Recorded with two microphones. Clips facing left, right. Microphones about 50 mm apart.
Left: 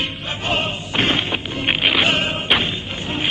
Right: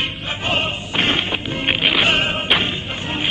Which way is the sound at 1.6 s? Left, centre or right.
Centre.